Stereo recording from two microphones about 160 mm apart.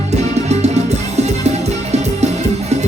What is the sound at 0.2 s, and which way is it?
Music, 45° right (ahead or behind).